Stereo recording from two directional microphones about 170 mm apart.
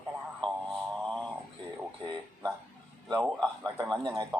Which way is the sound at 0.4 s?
5° left (ahead or behind).